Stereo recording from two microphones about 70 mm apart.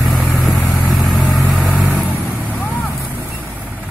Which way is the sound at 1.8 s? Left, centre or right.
Centre.